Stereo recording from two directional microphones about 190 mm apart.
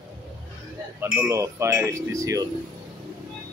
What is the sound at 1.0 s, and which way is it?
Speech, 15° right (ahead or behind).